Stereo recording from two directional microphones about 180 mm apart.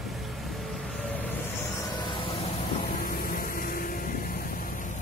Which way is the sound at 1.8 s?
25° left (ahead or behind).